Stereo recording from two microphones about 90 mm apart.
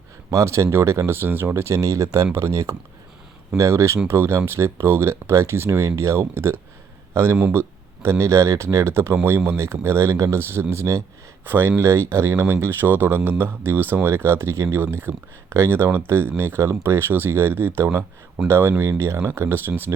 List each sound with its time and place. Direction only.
0.3 s speech: 35° right (ahead or behind)